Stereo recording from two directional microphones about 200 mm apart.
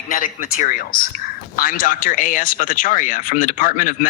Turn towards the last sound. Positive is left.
turn(degrees=40)  # may be behind; listen again after turning